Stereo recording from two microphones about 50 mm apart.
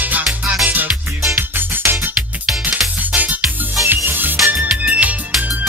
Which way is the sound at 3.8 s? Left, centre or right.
Right.